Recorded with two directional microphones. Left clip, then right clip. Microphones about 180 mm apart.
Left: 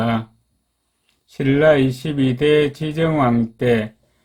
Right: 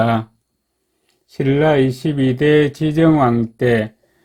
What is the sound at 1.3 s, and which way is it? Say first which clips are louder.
Speech: left 1 dB; 25° right (ahead or behind).